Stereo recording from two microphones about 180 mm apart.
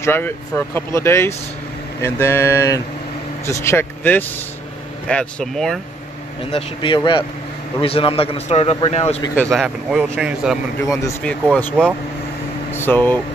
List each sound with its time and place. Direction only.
0.0 s speech: 15° left (ahead or behind)
6.5 s a man's voice: 30° left (ahead or behind)
9.2 s speech: 10° left (ahead or behind)
9.5 s speech: centre (ahead or behind)
9.9 s speech: 10° right (ahead or behind)
10.9 s speech: 15° left (ahead or behind)
11.2 s speech: 5° left (ahead or behind)